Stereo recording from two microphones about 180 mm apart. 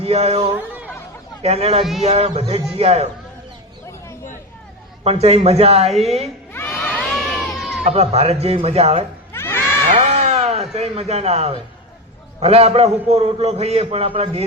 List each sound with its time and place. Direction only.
0.0 s speech: 35° right (ahead or behind)
0.5 s speech: 10° right (ahead or behind)
1.4 s a man's voice: 35° right (ahead or behind)
5.0 s a man's voice: 35° right (ahead or behind)
5.9 s a woman's voice: centre (ahead or behind)
6.5 s a sound: 10° left (ahead or behind)
7.9 s a man's voice: 35° right (ahead or behind)
9.3 s crowd: 15° left (ahead or behind)
10.0 s a sound: 40° right (ahead or behind)
12.4 s a man's voice: 35° right (ahead or behind)